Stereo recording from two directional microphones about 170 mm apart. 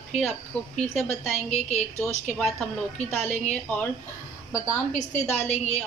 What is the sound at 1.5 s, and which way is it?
Speech, 35° left (ahead or behind).